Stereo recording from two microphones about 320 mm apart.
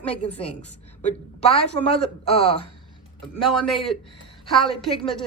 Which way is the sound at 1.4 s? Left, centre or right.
Centre.